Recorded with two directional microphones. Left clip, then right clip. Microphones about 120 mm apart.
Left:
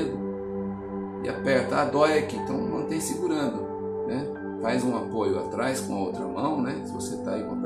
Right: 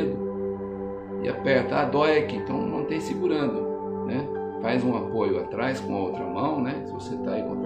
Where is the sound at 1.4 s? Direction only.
25° right (ahead or behind).